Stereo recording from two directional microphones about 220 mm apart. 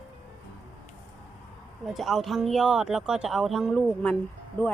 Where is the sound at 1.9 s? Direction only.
Centre (ahead or behind).